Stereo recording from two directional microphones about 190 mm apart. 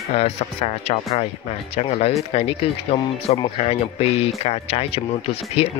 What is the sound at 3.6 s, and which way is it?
Speech, 30° left (ahead or behind).